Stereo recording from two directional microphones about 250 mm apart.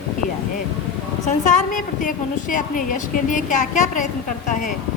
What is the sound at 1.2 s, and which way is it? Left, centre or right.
A woman's voice, left.